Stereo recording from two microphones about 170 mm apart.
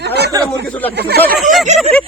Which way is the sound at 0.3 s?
20° right (ahead or behind).